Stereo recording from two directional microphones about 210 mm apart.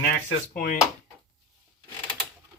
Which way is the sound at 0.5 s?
40° left (ahead or behind).